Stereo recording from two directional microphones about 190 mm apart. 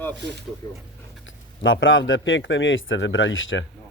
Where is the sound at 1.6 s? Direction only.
85° left.